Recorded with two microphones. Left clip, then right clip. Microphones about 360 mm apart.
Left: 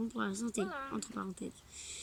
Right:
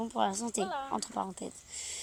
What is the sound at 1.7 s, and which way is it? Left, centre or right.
Owl, centre.